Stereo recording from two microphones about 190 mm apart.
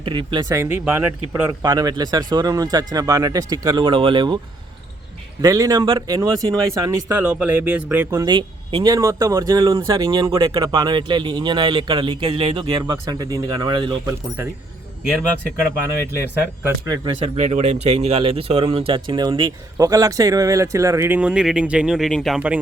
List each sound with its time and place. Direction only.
0.0 s speech: 25° right (ahead or behind)
5.4 s speech: 20° right (ahead or behind)
16.6 s speech: 20° right (ahead or behind)
17.2 s speech: 35° right (ahead or behind); by 22.5 s 5° right (ahead or behind)